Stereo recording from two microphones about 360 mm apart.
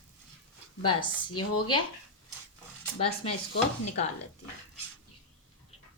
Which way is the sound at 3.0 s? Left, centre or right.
Centre.